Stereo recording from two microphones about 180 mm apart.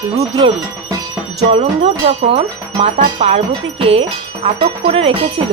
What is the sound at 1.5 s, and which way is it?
Wind chime, 35° right (ahead or behind).